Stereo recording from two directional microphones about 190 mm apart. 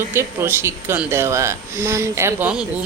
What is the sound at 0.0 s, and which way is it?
Speech, 15° right (ahead or behind).